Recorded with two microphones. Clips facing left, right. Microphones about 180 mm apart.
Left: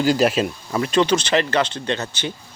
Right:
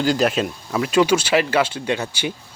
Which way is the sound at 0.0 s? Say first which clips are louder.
Left 1 dB; 5° left (ahead or behind).